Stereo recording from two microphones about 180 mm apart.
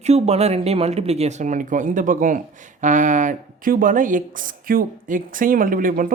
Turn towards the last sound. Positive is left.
turn(degrees=-50)  # may be behind; listen again after turning